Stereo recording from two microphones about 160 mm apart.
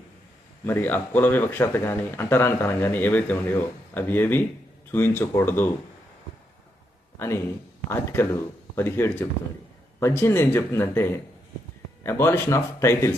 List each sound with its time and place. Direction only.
0.6 s speech: 10° left (ahead or behind)
7.2 s speech: 15° left (ahead or behind)